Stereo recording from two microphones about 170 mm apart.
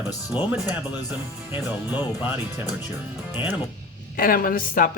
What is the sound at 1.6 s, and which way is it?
Speech, 10° right (ahead or behind).